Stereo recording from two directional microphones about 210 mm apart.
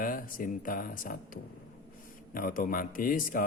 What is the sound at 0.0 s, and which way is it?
Speech, 40° left (ahead or behind).